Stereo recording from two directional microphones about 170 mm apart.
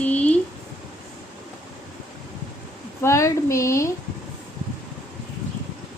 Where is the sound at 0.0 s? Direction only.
10° left (ahead or behind).